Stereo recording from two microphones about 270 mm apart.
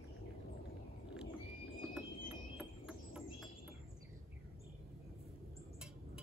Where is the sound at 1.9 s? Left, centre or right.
Centre.